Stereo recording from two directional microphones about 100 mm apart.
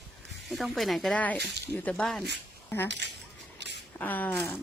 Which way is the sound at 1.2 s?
15° left (ahead or behind).